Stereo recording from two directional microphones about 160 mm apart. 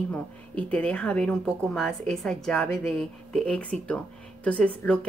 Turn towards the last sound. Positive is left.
turn(degrees=5)  # may be behind; listen again after turning